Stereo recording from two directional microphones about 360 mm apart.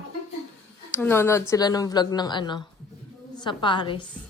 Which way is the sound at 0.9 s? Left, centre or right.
Centre.